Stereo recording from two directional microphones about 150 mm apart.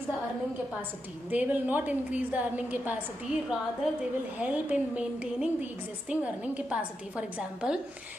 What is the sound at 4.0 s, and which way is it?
A woman's voice, 10° right (ahead or behind).